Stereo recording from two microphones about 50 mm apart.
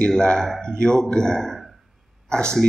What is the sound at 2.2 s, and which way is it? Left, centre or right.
Speech, centre.